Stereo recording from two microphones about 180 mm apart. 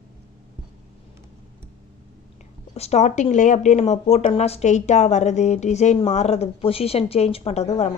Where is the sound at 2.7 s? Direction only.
35° left (ahead or behind).